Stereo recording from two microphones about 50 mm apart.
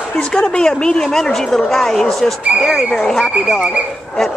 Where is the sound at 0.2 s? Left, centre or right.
Centre.